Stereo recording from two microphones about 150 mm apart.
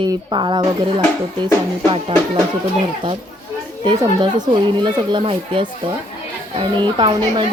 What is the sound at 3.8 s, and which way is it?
A woman's voice, 30° right (ahead or behind).